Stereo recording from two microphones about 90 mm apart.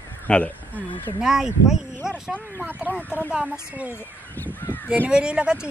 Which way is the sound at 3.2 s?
10° right (ahead or behind).